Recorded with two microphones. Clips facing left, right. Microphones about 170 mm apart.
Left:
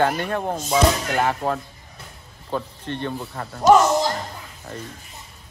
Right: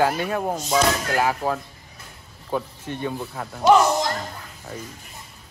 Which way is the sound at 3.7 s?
40° left (ahead or behind).